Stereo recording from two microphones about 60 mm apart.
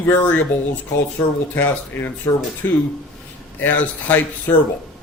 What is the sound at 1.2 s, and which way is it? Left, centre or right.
Speech, left.